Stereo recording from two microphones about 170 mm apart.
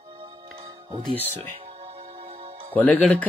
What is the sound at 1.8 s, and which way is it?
Music, 35° right (ahead or behind).